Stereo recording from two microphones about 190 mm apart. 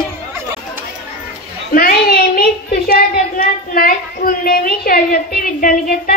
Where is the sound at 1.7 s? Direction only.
50° left (ahead or behind).